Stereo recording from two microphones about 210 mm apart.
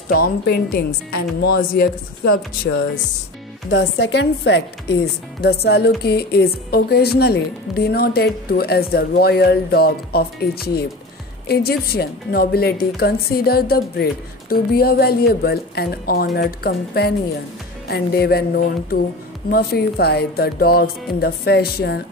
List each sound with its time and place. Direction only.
0.1 s music: 45° left (ahead or behind)
3.7 s a woman's voice: 55° left (ahead or behind)
5.4 s music: 50° left (ahead or behind)